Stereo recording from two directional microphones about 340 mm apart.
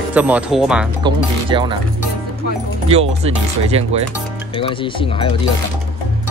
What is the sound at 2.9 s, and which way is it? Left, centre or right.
Speech, centre.